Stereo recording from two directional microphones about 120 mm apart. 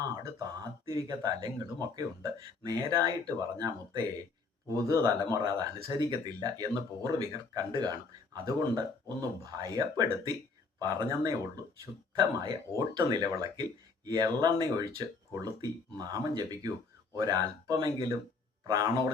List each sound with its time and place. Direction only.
0.3 s speech: 30° right (ahead or behind)